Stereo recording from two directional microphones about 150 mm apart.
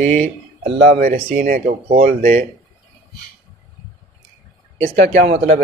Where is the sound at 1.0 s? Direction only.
80° right.